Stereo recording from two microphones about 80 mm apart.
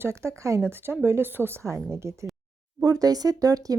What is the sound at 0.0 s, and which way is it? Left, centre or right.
Speech, right.